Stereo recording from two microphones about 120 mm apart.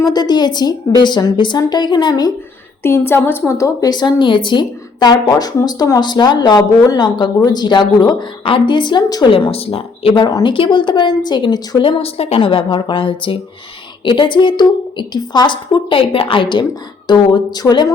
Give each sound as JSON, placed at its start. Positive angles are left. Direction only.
{"t": 0.0, "sound": "a woman's voice", "side_deg": 35}
{"t": 2.8, "sound": "a woman's voice", "side_deg": 20}
{"t": 9.3, "sound": "a woman's voice", "side_deg": 50}